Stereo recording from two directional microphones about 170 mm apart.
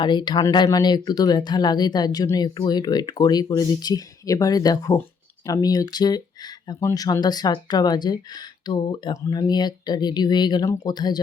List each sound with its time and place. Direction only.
0.0 s speech: 25° left (ahead or behind)